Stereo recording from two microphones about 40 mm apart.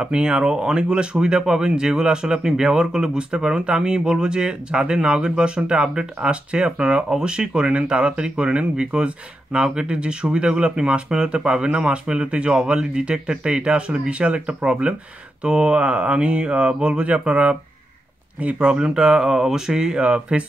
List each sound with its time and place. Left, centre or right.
0.0 s speech: right
18.6 s speech: right